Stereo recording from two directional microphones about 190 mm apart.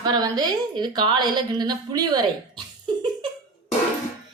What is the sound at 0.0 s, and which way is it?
A woman's voice, 20° right (ahead or behind).